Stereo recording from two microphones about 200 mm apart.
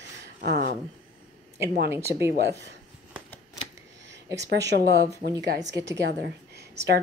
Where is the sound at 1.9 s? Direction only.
15° right (ahead or behind).